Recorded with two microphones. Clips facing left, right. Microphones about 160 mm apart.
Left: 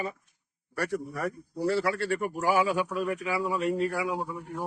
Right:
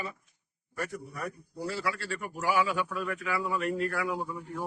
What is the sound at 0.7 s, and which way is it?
A man's voice, 80° left.